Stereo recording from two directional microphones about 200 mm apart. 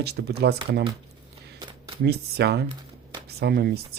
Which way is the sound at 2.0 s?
55° right (ahead or behind).